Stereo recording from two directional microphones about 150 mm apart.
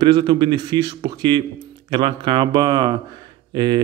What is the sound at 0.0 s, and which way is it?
Speech, 30° right (ahead or behind).